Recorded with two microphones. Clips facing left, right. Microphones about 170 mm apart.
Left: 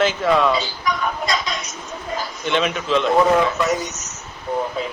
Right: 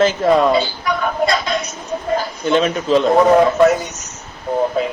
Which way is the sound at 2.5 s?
40° right (ahead or behind).